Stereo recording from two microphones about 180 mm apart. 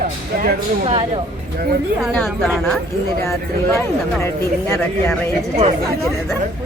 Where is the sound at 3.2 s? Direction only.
15° left (ahead or behind).